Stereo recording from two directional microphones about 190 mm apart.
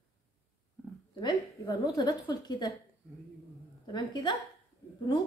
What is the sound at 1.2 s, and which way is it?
A woman's voice, 20° left (ahead or behind).